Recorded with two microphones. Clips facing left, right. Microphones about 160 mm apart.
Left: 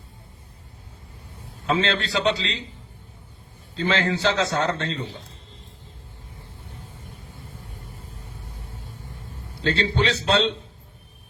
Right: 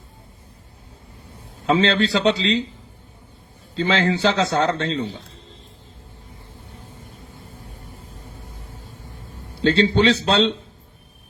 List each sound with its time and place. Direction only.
1.6 s a man's voice: 35° right (ahead or behind)
3.8 s a man's voice: 30° right (ahead or behind)
9.6 s a man's voice: 30° right (ahead or behind)